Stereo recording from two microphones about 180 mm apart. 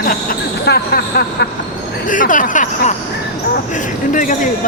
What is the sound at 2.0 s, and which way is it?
Speech, 45° left (ahead or behind).